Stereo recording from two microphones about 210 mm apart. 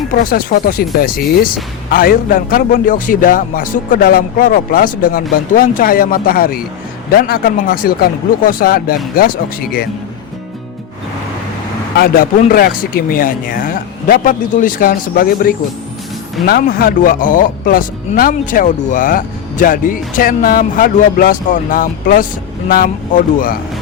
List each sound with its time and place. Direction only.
0.1 s a man's voice: 45° left (ahead or behind)
11.9 s a man's voice: 45° left (ahead or behind)